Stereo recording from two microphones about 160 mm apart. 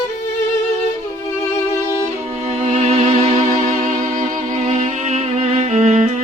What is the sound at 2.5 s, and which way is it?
Music, 40° right (ahead or behind).